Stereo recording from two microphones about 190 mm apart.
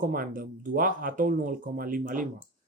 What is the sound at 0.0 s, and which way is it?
Speech, 45° right (ahead or behind).